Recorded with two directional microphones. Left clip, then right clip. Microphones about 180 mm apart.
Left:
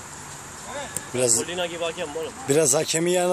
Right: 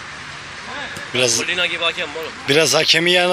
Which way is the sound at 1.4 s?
45° left (ahead or behind).